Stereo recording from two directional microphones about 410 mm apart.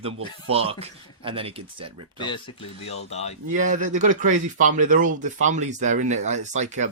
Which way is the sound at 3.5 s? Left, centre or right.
Centre.